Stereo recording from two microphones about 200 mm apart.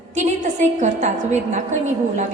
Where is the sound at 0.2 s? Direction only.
35° right (ahead or behind).